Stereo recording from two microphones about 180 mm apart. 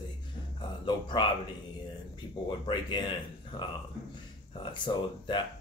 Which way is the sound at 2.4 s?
25° left (ahead or behind).